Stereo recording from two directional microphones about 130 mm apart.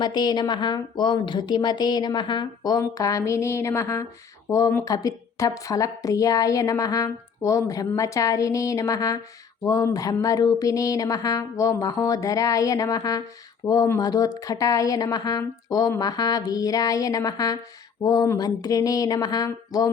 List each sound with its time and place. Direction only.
0.0 s a woman's voice: 35° left (ahead or behind)